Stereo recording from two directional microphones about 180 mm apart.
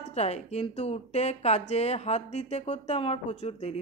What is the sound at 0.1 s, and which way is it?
A man's voice, 35° left (ahead or behind).